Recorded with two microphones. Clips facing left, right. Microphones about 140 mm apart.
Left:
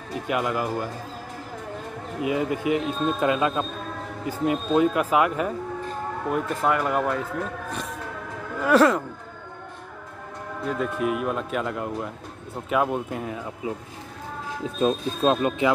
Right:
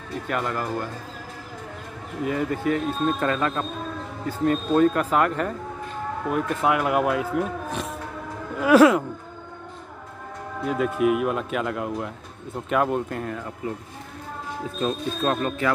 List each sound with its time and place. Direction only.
0.3 s speech: 10° left (ahead or behind)
2.2 s speech: 10° left (ahead or behind)
6.3 s speech: 5° right (ahead or behind)
8.5 s speech: 5° right (ahead or behind)
10.7 s speech: 5° right (ahead or behind)
14.8 s speech: 15° left (ahead or behind)